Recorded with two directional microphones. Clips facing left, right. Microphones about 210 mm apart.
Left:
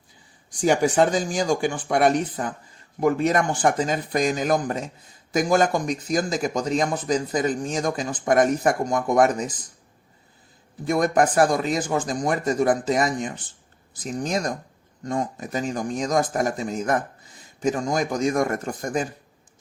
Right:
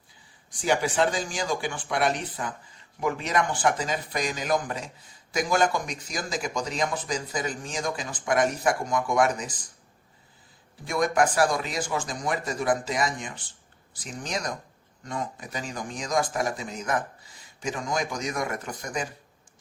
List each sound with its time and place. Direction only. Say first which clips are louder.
0.6 s speech: left 5 dB; 45° left (ahead or behind)
10.9 s speech: left 4 dB; 45° left (ahead or behind)